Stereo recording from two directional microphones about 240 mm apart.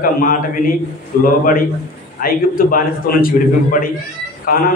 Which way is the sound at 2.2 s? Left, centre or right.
Left.